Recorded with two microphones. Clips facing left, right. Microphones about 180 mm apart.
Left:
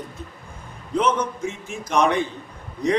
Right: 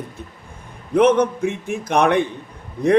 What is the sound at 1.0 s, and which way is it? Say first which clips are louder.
A man's voice: right 7 dB; 60° right (ahead or behind).